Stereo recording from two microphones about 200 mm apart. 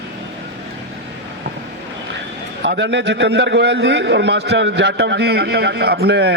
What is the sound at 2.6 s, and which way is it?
A man's voice, 60° right (ahead or behind).